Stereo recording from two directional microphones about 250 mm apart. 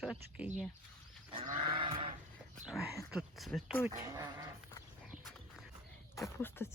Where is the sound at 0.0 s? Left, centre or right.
Centre.